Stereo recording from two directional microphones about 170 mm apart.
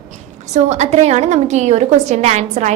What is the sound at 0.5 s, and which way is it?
A woman's voice, 40° right (ahead or behind).